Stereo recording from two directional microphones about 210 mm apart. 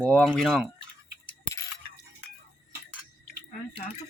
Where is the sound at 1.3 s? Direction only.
15° left (ahead or behind).